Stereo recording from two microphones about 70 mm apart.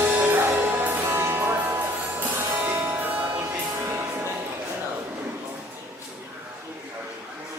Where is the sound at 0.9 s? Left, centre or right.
Right.